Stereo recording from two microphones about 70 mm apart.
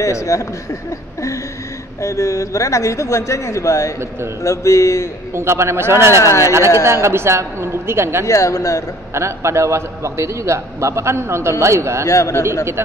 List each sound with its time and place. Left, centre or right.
0.0 s speech: left
2.0 s speech: left
5.3 s a woman's voice: right
8.3 s speech: left
9.1 s a man's voice: right
12.1 s speech: left